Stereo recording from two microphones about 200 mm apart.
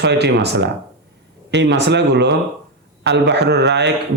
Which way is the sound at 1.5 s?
60° right (ahead or behind).